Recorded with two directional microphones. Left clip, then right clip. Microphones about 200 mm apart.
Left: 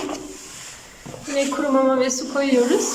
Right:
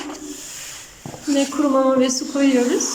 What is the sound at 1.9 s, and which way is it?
Speech, centre (ahead or behind).